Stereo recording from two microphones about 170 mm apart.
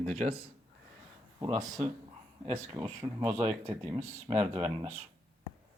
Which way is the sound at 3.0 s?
25° right (ahead or behind).